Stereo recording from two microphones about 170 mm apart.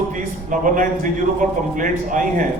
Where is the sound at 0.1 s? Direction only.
50° right (ahead or behind).